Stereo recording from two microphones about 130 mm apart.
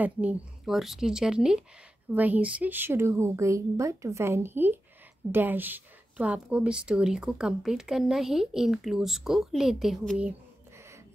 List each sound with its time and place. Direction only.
0.0 s a woman's voice: 10° right (ahead or behind)